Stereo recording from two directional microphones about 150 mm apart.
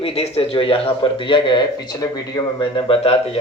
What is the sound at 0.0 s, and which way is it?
Speech, 40° left (ahead or behind).